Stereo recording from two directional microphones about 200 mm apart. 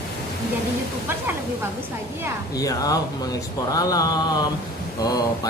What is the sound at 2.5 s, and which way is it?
Speech, 20° left (ahead or behind).